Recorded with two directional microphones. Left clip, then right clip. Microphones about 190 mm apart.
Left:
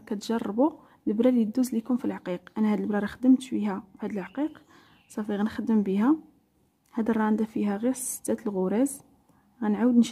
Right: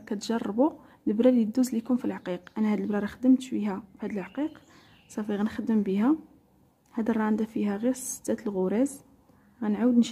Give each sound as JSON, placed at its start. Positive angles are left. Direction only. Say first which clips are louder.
{"t": 0.0, "sound": "a woman's voice", "louder": "left 1 dB", "side_deg": 15}